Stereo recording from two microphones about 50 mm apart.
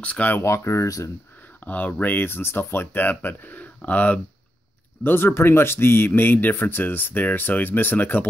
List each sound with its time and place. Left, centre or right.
0.0 s speech: left
0.4 s speech: left
1.6 s speech: left
5.0 s speech: left